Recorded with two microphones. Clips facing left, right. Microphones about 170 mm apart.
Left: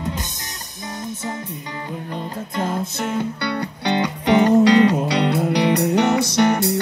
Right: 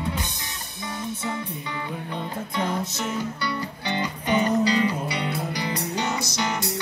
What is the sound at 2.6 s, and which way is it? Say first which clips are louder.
Music: left 4 dB; 65° left (ahead or behind).